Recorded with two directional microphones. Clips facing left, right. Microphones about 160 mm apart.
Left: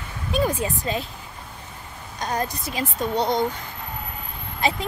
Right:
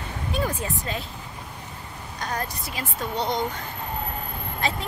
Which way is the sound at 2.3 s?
15° left (ahead or behind).